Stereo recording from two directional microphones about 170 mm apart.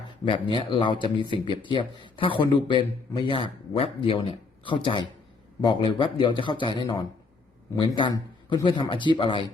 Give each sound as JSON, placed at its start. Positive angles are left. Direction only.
{"t": 0.3, "sound": "a man's voice", "side_deg": 30}